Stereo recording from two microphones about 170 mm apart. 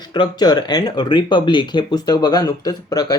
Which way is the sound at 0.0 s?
25° left (ahead or behind).